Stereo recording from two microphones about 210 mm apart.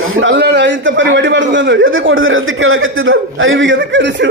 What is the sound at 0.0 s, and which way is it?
A man's voice, 70° right (ahead or behind).